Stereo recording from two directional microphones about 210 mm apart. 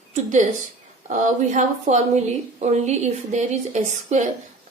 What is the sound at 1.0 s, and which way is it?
A woman's voice, 35° right (ahead or behind).